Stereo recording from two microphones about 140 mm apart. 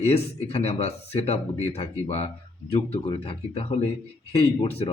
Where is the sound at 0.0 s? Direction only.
50° left (ahead or behind).